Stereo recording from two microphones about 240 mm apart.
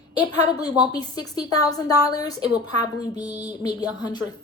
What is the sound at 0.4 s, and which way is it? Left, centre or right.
A woman's voice, centre.